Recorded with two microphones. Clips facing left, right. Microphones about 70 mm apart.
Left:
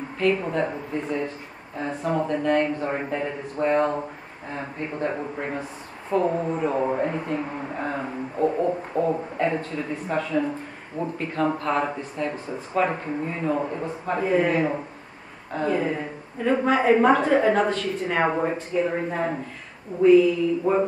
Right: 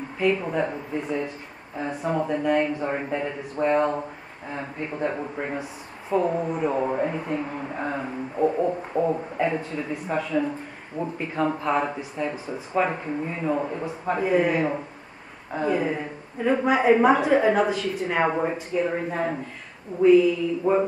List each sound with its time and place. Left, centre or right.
0.2 s speech: centre
11.0 s speech: centre
18.2 s speech: centre
20.7 s speech: centre